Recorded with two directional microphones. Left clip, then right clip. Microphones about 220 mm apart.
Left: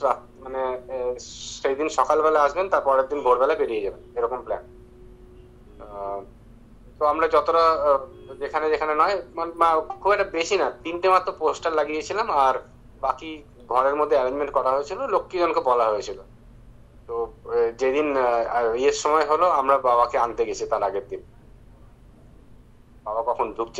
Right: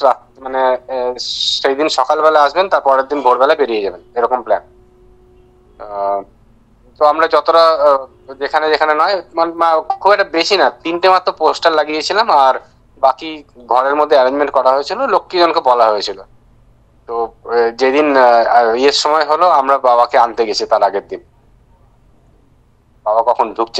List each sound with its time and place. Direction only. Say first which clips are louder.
0.0 s a man's voice: right 11 dB; 50° right (ahead or behind)
5.8 s a man's voice: right 14 dB; 45° right (ahead or behind)
23.0 s a man's voice: right 12 dB; 45° right (ahead or behind)